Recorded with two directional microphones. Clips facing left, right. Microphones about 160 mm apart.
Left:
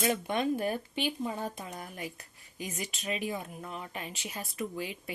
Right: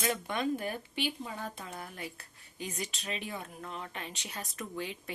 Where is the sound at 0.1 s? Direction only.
20° left (ahead or behind).